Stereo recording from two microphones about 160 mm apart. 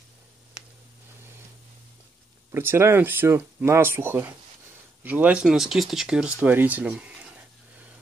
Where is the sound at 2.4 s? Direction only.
15° right (ahead or behind).